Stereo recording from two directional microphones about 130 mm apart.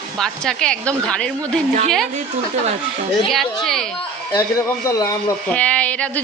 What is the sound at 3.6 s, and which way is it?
Speech, centre (ahead or behind).